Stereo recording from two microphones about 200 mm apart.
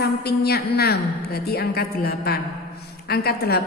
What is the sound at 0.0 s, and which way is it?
A woman's voice, 55° left (ahead or behind).